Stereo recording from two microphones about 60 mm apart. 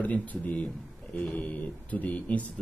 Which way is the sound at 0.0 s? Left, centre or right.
Left.